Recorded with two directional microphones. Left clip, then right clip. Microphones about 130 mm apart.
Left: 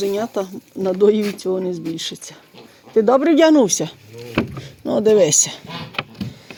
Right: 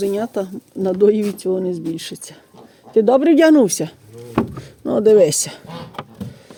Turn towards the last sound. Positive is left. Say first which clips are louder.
# right 1 dB
turn(degrees=-40)  # may be behind; listen again after turning